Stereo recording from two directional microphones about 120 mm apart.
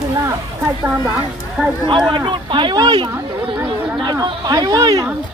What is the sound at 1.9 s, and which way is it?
Speech, 40° right (ahead or behind).